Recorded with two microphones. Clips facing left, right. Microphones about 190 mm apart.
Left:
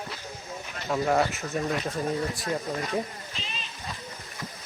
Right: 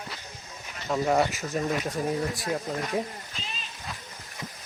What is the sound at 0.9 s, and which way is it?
Speech, centre (ahead or behind).